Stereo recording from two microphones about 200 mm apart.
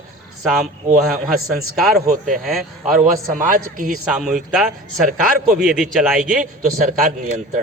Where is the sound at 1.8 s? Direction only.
45° right (ahead or behind).